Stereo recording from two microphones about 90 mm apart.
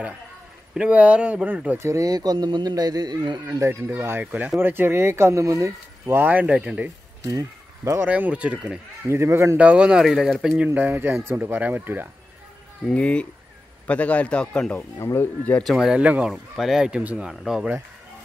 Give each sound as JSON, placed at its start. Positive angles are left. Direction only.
{"t": 0.7, "sound": "speech", "side_deg": -15}
{"t": 1.9, "sound": "speech", "side_deg": -40}
{"t": 3.4, "sound": "speech", "side_deg": -30}
{"t": 6.2, "sound": "speech", "side_deg": -15}
{"t": 7.2, "sound": "speech", "side_deg": -35}
{"t": 8.0, "sound": "speech", "side_deg": -15}
{"t": 9.0, "sound": "speech", "side_deg": -30}
{"t": 9.6, "sound": "speech", "side_deg": -15}
{"t": 10.6, "sound": "speech", "side_deg": -20}
{"t": 12.9, "sound": "speech", "side_deg": 10}
{"t": 15.0, "sound": "speech", "side_deg": 35}
{"t": 15.6, "sound": "speech", "side_deg": 0}